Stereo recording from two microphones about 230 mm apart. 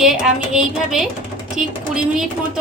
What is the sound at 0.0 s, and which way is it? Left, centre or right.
Speech, centre.